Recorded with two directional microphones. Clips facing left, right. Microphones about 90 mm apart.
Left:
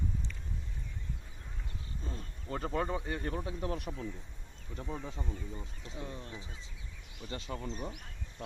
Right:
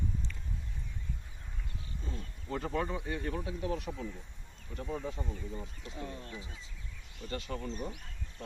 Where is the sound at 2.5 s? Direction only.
35° left (ahead or behind).